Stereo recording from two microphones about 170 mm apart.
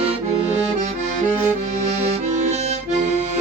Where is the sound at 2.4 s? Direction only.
40° right (ahead or behind).